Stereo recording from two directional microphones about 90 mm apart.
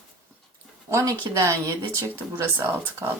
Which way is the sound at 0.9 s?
35° right (ahead or behind).